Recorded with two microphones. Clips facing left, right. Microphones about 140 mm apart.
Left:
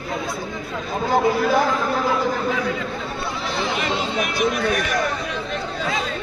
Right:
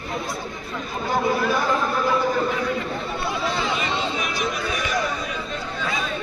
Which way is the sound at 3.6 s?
65° left (ahead or behind).